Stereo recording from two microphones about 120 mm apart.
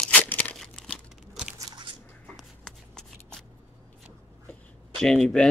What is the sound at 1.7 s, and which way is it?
Squish, 40° right (ahead or behind).